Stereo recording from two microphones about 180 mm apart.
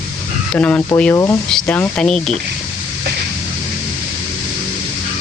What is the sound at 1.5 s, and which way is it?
Speech, 5° left (ahead or behind).